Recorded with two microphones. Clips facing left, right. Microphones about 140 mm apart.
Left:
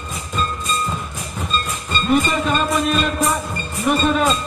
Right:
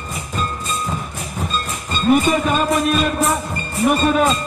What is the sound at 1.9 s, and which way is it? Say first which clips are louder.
Music: right 3 dB; 10° right (ahead or behind).